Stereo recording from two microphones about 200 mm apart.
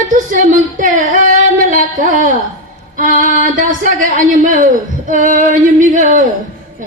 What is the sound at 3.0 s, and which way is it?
Music, 40° right (ahead or behind).